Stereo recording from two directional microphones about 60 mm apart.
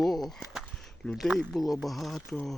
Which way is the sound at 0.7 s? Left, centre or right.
Centre.